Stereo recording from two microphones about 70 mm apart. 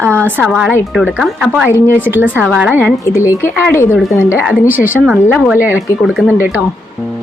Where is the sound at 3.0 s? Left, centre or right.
Left.